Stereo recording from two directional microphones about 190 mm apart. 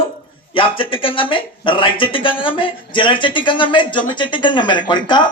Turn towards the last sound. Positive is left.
turn(degrees=25)  # may be behind; listen again after turning